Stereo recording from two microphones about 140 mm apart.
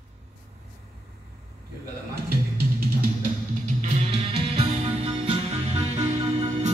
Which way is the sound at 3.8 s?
45° right (ahead or behind).